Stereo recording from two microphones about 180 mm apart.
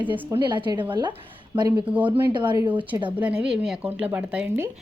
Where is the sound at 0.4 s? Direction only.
25° right (ahead or behind).